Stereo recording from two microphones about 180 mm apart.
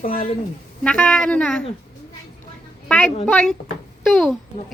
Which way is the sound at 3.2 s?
5° left (ahead or behind).